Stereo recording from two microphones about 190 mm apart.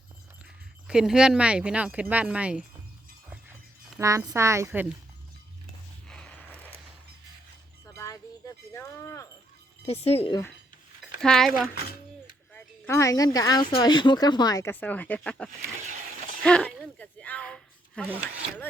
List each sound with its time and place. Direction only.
0.9 s speech: 5° right (ahead or behind)
4.3 s a woman's voice: 15° right (ahead or behind)
6.1 s a sound: 5° left (ahead or behind)
7.9 s wind chime: 15° left (ahead or behind)
9.8 s speech: 30° left (ahead or behind)
11.0 s speech: centre (ahead or behind)
12.5 s a woman's voice: 10° left (ahead or behind)
16.4 s a sound: 5° left (ahead or behind)